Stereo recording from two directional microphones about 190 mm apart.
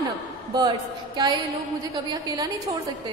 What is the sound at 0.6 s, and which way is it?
A woman's voice, 20° right (ahead or behind).